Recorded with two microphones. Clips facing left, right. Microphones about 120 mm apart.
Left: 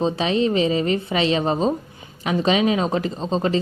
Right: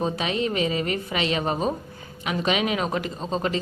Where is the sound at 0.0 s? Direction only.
30° left (ahead or behind).